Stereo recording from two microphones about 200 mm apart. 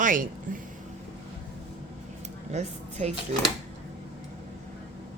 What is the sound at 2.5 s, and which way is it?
Speech, 35° right (ahead or behind).